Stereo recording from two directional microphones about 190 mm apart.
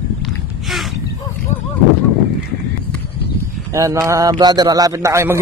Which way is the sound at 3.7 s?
15° right (ahead or behind).